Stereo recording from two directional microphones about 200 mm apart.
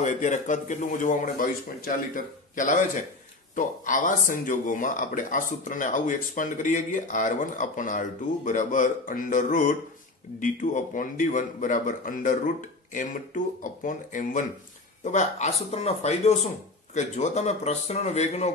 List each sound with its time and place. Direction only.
0.0 s a man's voice: 35° left (ahead or behind)